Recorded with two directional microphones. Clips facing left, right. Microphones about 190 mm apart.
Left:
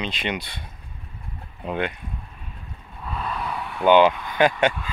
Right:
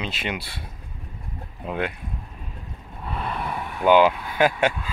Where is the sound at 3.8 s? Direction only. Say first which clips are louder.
Left 1 dB; 5° right (ahead or behind).